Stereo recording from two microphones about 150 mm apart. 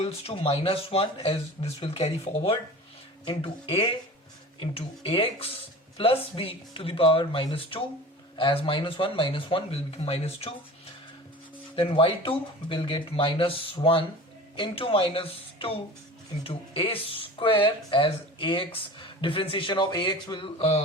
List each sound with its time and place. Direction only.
0.0 s speech: 40° left (ahead or behind)
11.8 s speech: 35° left (ahead or behind)